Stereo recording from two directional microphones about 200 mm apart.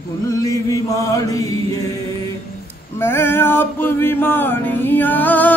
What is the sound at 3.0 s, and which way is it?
Male singing, 10° left (ahead or behind).